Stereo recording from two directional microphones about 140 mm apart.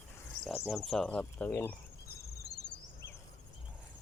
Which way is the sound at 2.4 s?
25° left (ahead or behind).